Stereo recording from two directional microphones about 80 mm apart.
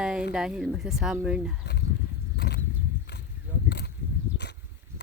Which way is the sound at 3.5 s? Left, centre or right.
Right.